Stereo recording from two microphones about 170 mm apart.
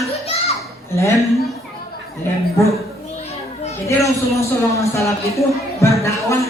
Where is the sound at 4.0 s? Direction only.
20° left (ahead or behind).